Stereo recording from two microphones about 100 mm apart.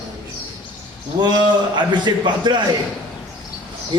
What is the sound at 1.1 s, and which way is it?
A man's voice, 45° right (ahead or behind).